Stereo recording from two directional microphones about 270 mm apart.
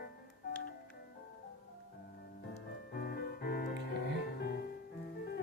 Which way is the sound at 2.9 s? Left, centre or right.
Left.